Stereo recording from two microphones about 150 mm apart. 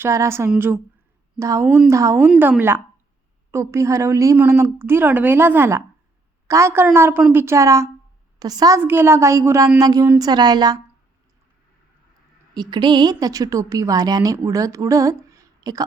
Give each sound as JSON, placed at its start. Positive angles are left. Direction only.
{"t": 0.0, "sound": "a woman's voice", "side_deg": -20}
{"t": 2.1, "sound": "a woman's voice", "side_deg": -10}
{"t": 12.5, "sound": "a woman's voice", "side_deg": -30}